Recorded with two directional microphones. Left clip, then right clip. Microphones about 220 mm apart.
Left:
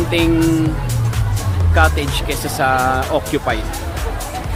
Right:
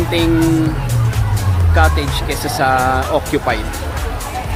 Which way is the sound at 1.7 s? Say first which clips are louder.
Even; 5° left (ahead or behind).